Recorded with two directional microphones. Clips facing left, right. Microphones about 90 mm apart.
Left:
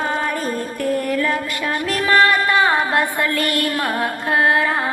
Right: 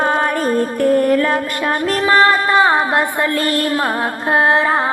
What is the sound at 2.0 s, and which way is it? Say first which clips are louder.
Speech: right 2 dB; 30° right (ahead or behind).